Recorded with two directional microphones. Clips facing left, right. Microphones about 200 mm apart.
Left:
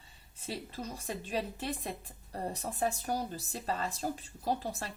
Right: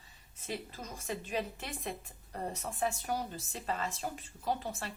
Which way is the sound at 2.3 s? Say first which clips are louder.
Left 1 dB; 35° left (ahead or behind).